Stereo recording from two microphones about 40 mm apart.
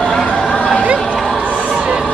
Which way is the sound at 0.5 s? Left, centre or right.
Left.